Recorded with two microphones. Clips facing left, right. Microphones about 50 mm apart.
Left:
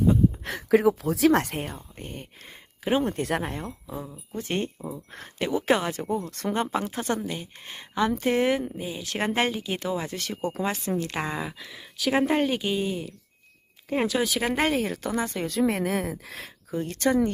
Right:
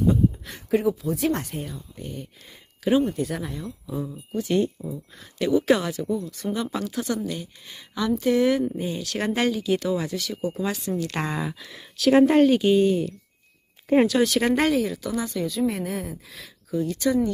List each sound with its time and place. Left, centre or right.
0.4 s speech: left
2.0 s speech: left
3.0 s speech: left
4.4 s speech: left
6.7 s speech: left
7.3 s speech: left
7.6 s speech: left
8.7 s speech: centre
9.0 s speech: left
11.2 s speech: centre
14.7 s speech: left
15.4 s speech: left
16.7 s speech: left